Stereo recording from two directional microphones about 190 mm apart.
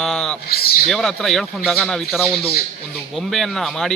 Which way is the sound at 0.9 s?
Centre (ahead or behind).